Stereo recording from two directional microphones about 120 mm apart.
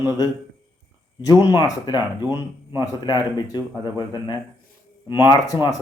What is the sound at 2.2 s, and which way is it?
Speech, 20° right (ahead or behind).